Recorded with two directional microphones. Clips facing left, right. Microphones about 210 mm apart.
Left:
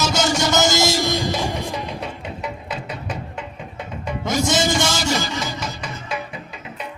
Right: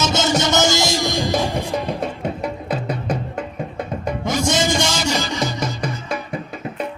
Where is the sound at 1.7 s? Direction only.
45° right (ahead or behind).